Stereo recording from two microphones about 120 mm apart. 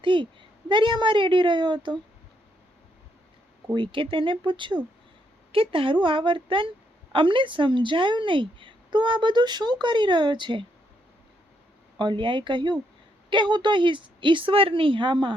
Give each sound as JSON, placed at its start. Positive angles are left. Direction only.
{"t": 0.0, "sound": "a woman's voice", "side_deg": -45}
{"t": 3.8, "sound": "a woman's voice", "side_deg": -45}
{"t": 11.9, "sound": "a woman's voice", "side_deg": -40}